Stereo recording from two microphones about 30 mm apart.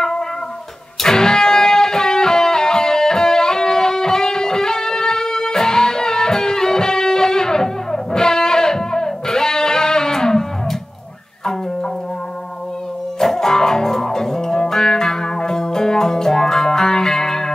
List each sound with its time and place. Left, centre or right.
1.0 s music: left
13.2 s music: centre